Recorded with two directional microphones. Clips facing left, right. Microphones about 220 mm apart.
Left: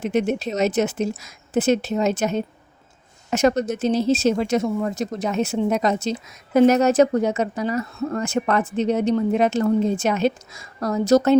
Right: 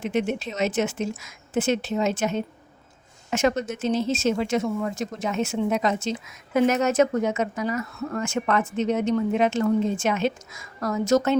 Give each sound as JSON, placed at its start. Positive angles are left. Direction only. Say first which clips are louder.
{"t": 0.0, "sound": "speech", "louder": "left 4 dB", "side_deg": 40}